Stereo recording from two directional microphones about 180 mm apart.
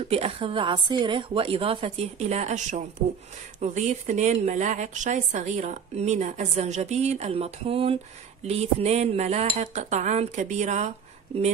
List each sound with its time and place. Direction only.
0.1 s a woman's voice: 30° right (ahead or behind)